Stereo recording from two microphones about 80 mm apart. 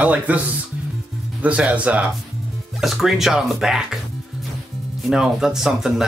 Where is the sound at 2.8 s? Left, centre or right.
Centre.